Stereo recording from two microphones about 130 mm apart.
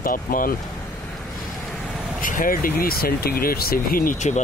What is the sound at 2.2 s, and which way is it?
Speech, 90° left.